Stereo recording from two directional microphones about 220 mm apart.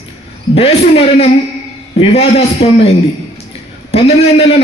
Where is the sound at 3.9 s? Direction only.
25° left (ahead or behind).